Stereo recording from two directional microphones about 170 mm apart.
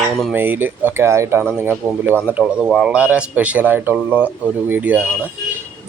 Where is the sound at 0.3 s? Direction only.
10° right (ahead or behind).